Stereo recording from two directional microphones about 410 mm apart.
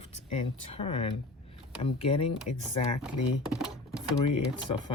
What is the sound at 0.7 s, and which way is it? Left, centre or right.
Speech, centre.